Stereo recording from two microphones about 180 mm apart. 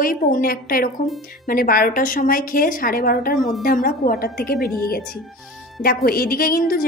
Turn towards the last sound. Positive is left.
turn(degrees=50)  # may be behind; listen again after turning